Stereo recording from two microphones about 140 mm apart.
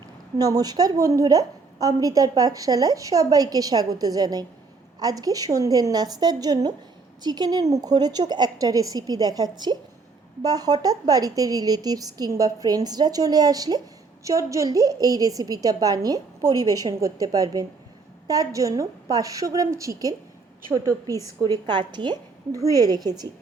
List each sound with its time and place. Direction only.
0.3 s a woman's voice: 25° right (ahead or behind)